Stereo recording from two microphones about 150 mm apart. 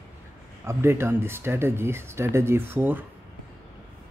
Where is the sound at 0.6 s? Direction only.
15° right (ahead or behind).